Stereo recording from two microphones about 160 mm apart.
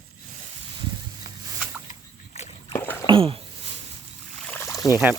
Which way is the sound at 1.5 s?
10° right (ahead or behind).